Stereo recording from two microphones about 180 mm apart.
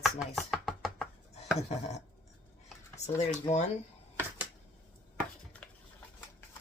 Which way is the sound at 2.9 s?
40° left (ahead or behind).